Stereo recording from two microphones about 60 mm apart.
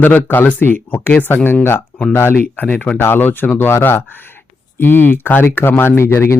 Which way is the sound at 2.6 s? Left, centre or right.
Left.